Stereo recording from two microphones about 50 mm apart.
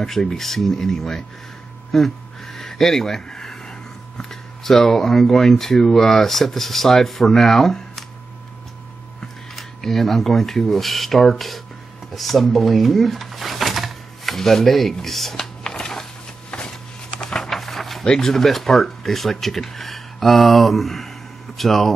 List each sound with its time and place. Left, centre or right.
0.0 s speech: centre
1.9 s a sound: centre
4.2 s speech: centre
9.6 s speech: centre
15.6 s a sound: centre
18.0 s speech: centre